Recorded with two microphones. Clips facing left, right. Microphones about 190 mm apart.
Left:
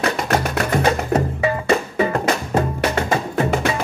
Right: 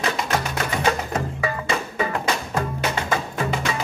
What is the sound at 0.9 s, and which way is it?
Music, 35° left (ahead or behind).